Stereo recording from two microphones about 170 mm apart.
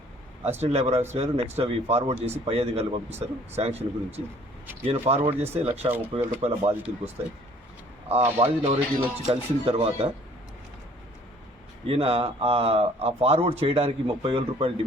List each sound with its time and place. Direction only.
0.4 s speech: 40° right (ahead or behind)
5.3 s speech: 10° right (ahead or behind)
5.6 s speech: 35° right (ahead or behind)
8.1 s speech: 40° right (ahead or behind)
11.9 s speech: 35° right (ahead or behind)